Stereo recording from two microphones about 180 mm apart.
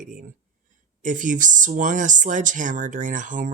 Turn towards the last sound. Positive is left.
turn(degrees=-45)  # may be behind; listen again after turning